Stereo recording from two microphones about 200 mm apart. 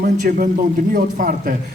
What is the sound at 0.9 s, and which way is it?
Speech, 45° right (ahead or behind).